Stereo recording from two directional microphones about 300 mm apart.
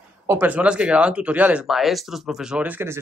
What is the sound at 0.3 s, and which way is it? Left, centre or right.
Speech, centre.